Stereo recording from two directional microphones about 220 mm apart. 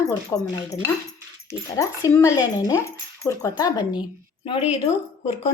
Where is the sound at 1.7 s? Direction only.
15° left (ahead or behind).